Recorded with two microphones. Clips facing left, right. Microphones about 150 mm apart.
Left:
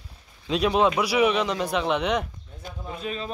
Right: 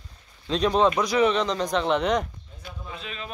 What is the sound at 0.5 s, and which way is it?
A man's voice, 5° left (ahead or behind).